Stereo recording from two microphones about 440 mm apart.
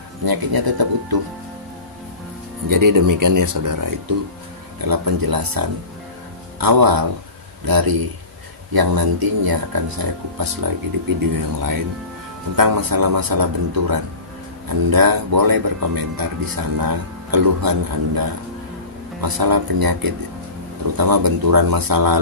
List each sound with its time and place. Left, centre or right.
0.2 s speech: right
2.7 s speech: right